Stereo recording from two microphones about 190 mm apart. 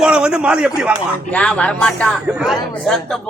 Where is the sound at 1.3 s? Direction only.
5° left (ahead or behind).